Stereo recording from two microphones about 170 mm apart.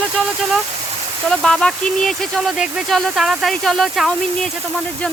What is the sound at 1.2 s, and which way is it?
Speech, centre (ahead or behind).